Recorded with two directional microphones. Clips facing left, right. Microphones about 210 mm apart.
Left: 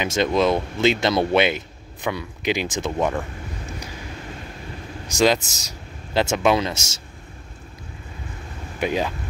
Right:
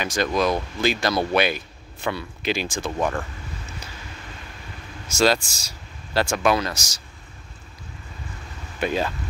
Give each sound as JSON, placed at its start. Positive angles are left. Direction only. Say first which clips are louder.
{"t": 0.0, "sound": "speech", "louder": "left 3 dB", "side_deg": 25}
{"t": 5.0, "sound": "speech", "louder": "left 1 dB", "side_deg": 15}
{"t": 8.7, "sound": "speech", "louder": "left 1 dB", "side_deg": 15}